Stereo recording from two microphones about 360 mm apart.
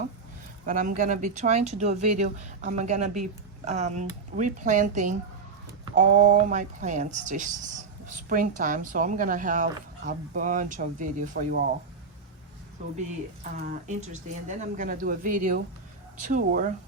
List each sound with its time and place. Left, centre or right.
0.6 s speech: right
13.6 s speech: centre